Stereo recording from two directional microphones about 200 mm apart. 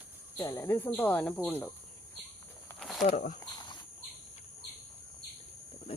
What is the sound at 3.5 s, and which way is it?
Cricket, 20° left (ahead or behind).